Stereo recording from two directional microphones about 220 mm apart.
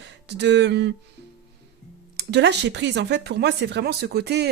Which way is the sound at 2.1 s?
50° right (ahead or behind).